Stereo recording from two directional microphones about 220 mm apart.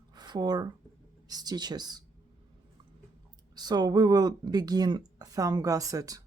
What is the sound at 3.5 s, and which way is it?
Speech, 20° right (ahead or behind).